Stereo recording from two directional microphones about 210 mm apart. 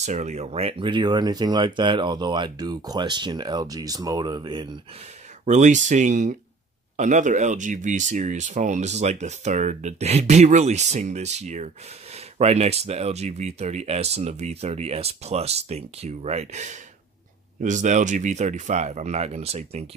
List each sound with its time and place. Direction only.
0.0 s speech: 35° right (ahead or behind)
5.4 s speech: 35° right (ahead or behind)